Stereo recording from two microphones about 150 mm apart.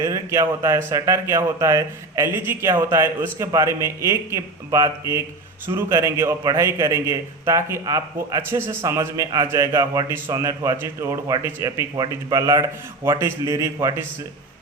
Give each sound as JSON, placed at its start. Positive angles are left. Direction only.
{"t": 0.0, "sound": "a man's voice", "side_deg": -20}